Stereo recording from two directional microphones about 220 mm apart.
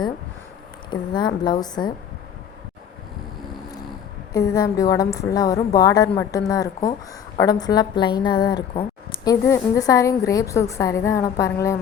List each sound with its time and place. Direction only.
0.9 s a woman's voice: 20° left (ahead or behind)
4.3 s a woman's voice: 15° left (ahead or behind)